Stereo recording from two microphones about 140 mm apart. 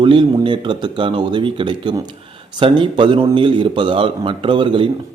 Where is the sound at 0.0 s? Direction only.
35° right (ahead or behind).